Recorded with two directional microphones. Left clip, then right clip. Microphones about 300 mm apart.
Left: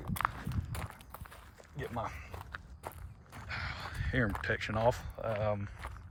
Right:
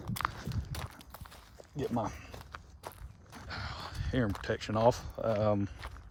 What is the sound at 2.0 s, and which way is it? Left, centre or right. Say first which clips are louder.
Speech: right 2 dB; right.